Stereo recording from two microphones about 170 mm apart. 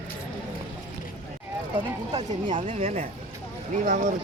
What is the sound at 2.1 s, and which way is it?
Speech, 30° right (ahead or behind).